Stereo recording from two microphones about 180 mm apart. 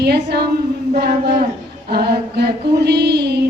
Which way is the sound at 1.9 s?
65° right (ahead or behind).